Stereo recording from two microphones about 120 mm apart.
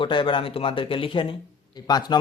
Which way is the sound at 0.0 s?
45° left (ahead or behind).